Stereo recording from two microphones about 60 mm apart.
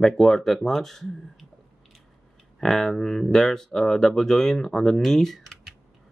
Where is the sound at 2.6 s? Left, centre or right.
Centre.